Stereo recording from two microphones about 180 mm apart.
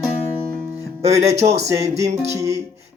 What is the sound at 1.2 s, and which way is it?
Music, 40° right (ahead or behind).